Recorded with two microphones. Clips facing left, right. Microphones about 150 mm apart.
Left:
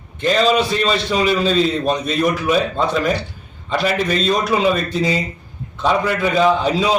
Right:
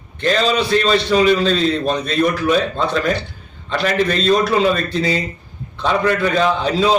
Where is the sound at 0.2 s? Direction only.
5° left (ahead or behind).